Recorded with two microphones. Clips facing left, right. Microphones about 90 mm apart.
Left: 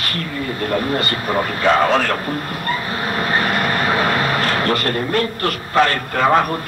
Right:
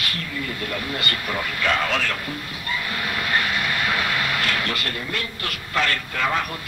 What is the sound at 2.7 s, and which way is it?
Vehicle, 40° left (ahead or behind).